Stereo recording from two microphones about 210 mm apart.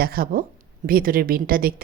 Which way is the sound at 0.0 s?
45° right (ahead or behind).